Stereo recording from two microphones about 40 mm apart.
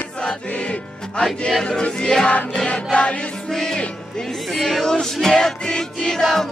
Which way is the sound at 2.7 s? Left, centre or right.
Left.